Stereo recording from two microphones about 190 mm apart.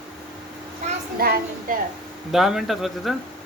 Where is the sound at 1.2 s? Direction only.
50° right (ahead or behind).